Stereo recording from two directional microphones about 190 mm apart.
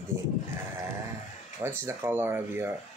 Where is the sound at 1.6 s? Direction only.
15° right (ahead or behind).